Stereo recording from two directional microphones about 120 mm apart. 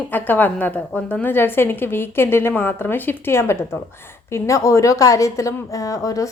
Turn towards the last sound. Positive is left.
turn(degrees=25)  # may be behind; listen again after turning